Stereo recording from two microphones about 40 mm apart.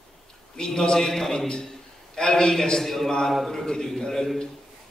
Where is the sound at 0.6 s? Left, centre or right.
Centre.